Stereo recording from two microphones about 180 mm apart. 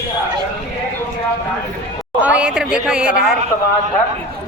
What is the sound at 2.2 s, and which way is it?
Speech, 5° right (ahead or behind).